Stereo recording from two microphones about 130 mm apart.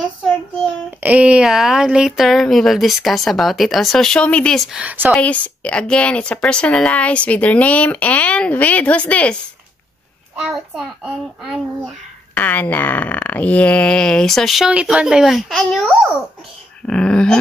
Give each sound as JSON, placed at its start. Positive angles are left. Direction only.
{"t": 1.0, "sound": "speech", "side_deg": -10}
{"t": 4.7, "sound": "speech", "side_deg": -15}
{"t": 5.1, "sound": "speech", "side_deg": 10}
{"t": 10.5, "sound": "speech", "side_deg": 0}
{"t": 12.4, "sound": "speech", "side_deg": 15}